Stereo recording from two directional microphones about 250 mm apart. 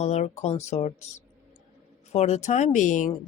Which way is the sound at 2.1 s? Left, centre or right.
Left.